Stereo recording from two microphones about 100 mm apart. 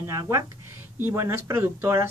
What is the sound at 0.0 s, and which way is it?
Speech, 30° right (ahead or behind).